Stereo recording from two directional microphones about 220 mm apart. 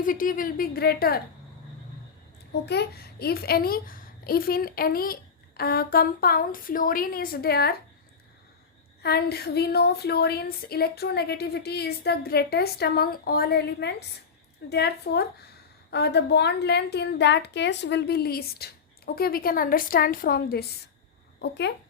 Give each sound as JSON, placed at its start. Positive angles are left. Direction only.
{"t": 0.0, "sound": "speech", "side_deg": 40}
{"t": 2.6, "sound": "a child's voice", "side_deg": 45}
{"t": 9.0, "sound": "a child's voice", "side_deg": 45}